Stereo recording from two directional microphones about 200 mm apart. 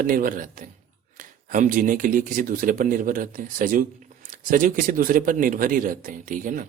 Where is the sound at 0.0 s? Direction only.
45° right (ahead or behind).